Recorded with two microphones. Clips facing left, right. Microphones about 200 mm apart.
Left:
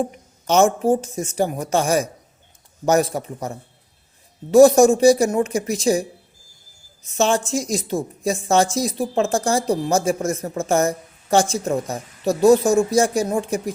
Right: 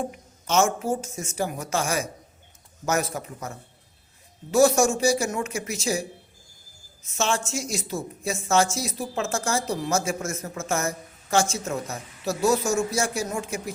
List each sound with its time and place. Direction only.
0.4 s a woman's voice: 35° left (ahead or behind)